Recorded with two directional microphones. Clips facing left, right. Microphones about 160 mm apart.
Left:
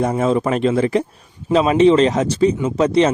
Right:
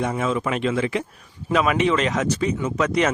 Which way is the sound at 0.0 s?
35° left (ahead or behind).